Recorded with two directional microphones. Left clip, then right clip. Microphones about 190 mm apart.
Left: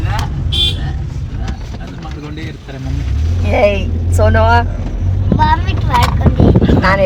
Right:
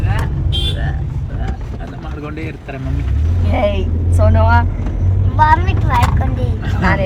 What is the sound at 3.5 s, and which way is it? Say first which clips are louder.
Vehicle: left 5 dB; 50° left (ahead or behind).